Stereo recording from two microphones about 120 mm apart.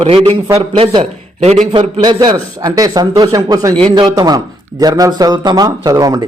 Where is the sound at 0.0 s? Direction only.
55° right (ahead or behind).